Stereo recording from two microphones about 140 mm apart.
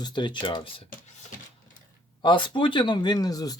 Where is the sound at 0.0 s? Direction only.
35° left (ahead or behind).